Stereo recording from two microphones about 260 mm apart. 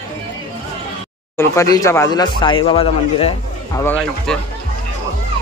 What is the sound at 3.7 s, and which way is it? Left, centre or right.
Speech, centre.